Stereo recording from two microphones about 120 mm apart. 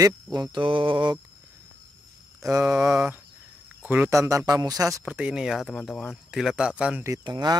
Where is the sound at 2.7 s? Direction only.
5° right (ahead or behind).